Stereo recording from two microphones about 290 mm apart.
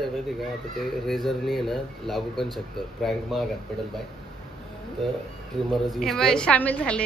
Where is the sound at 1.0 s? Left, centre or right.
Centre.